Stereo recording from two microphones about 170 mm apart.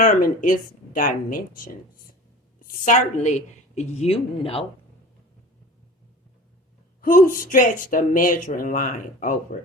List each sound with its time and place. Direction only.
0.0 s a woman's voice: 50° left (ahead or behind)
7.0 s speech: 55° left (ahead or behind)